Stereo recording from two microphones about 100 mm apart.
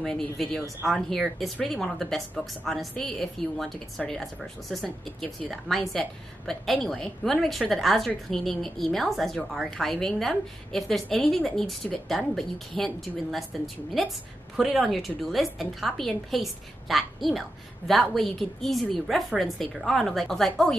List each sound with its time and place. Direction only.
0.0 s a woman's voice: 5° left (ahead or behind)